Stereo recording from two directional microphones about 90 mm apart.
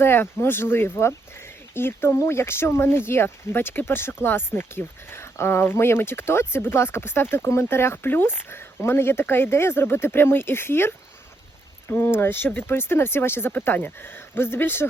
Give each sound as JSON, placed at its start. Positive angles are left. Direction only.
{"t": 0.0, "sound": "speech", "side_deg": 25}